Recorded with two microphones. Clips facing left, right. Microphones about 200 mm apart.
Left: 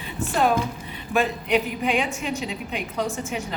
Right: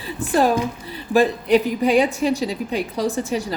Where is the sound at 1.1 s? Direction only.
35° right (ahead or behind).